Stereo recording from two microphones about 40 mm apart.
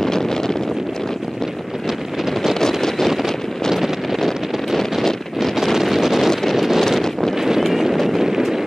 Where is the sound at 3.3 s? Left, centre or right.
Centre.